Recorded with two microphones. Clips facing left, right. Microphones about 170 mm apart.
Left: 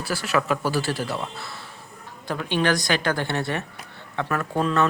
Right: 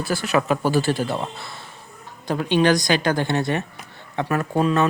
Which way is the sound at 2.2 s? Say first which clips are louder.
Right 5 dB; 20° right (ahead or behind).